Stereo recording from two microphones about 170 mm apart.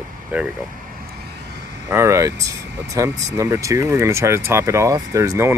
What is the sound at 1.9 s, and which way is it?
Speech, 15° right (ahead or behind).